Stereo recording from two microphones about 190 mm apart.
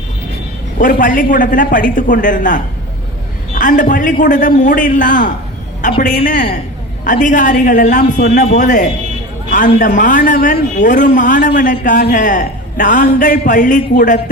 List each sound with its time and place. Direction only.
0.8 s a man's voice: 45° left (ahead or behind)